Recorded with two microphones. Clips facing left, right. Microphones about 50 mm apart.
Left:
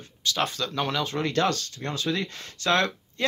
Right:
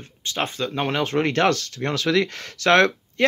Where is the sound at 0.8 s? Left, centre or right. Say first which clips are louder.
Right 6 dB; right.